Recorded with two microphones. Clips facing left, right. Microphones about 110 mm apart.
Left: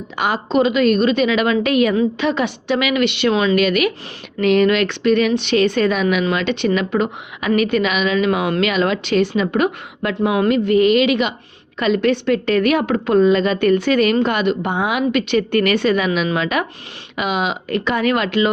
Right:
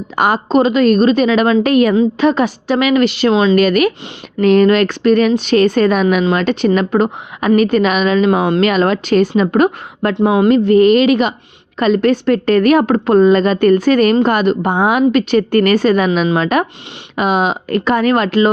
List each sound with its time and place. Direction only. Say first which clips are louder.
0.2 s a woman's voice: right 4 dB; 45° right (ahead or behind)